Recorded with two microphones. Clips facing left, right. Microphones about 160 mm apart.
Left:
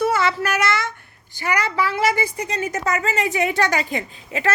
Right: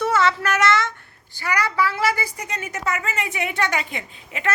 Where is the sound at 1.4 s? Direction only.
20° left (ahead or behind).